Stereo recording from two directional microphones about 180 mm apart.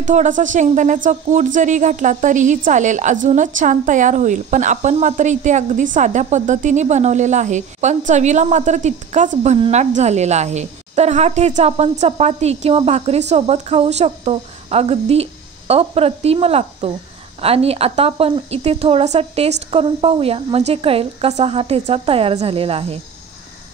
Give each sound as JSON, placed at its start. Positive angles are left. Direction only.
{"t": 0.0, "sound": "a woman's voice", "side_deg": -45}